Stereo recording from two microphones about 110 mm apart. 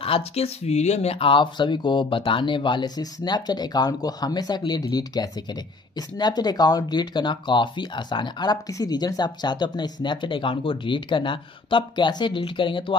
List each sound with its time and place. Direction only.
0.0 s speech: 65° left (ahead or behind)